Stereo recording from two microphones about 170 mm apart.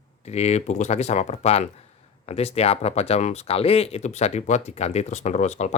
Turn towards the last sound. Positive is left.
turn(degrees=45)  # may be behind; listen again after turning